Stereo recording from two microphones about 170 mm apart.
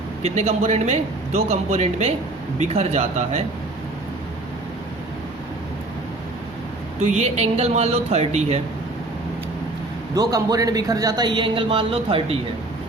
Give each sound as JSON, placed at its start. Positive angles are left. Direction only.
{"t": 0.2, "sound": "a man's voice", "side_deg": -40}
{"t": 7.1, "sound": "a man's voice", "side_deg": -40}
{"t": 10.2, "sound": "speech", "side_deg": -20}